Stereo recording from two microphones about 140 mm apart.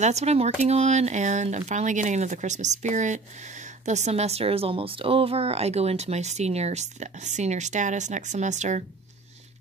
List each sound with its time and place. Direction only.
0.0 s speech: 50° right (ahead or behind)